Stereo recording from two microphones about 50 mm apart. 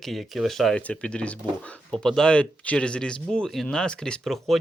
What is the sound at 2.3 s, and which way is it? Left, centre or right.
Speech, left.